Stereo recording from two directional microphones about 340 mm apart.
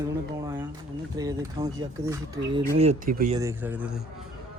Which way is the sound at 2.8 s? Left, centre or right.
Right.